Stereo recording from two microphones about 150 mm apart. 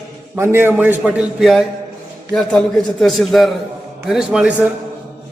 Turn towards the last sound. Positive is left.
turn(degrees=-10)  # may be behind; listen again after turning